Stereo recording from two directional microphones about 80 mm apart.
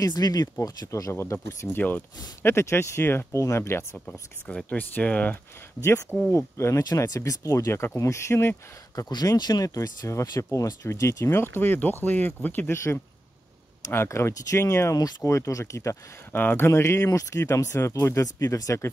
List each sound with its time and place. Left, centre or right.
0.0 s speech: left
1.1 s speech: left
1.8 s speech: left
2.4 s speech: left
4.5 s speech: centre
5.8 s speech: left
8.9 s speech: left
9.8 s speech: left
12.7 s speech: left
15.0 s speech: left
15.2 s speech: left
16.3 s speech: left